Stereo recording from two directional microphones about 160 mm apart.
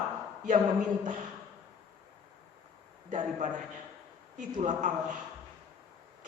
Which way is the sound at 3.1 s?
50° right (ahead or behind).